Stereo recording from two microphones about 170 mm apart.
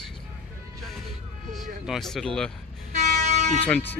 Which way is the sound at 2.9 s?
45° right (ahead or behind).